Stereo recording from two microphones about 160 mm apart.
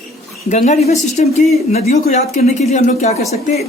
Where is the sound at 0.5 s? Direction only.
45° left (ahead or behind).